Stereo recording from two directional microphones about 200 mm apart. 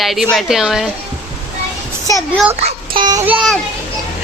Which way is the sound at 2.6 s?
25° right (ahead or behind).